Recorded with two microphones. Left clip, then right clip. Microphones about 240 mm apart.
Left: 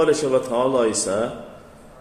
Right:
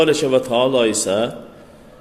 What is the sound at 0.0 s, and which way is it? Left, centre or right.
A man's voice, right.